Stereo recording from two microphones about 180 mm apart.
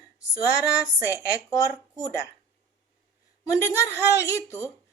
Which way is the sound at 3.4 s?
15° left (ahead or behind).